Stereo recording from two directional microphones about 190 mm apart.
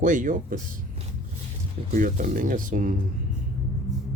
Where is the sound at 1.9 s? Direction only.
45° right (ahead or behind).